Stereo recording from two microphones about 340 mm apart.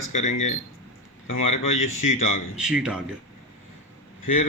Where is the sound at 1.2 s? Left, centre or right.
Left.